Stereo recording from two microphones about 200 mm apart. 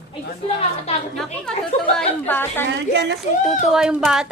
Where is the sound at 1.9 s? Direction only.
10° left (ahead or behind).